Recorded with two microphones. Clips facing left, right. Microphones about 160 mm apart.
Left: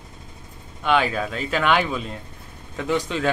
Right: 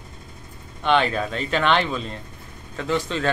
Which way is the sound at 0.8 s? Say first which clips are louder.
Right 1 dB; 5° left (ahead or behind).